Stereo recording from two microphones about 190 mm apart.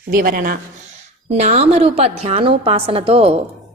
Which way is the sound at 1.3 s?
35° right (ahead or behind).